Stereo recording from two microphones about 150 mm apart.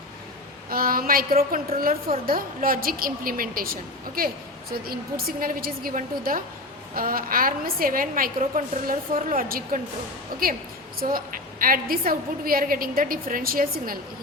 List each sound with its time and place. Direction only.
0.7 s a woman's voice: 75° right (ahead or behind)
4.9 s a woman's voice: 75° right (ahead or behind)
11.6 s a woman's voice: 70° right (ahead or behind)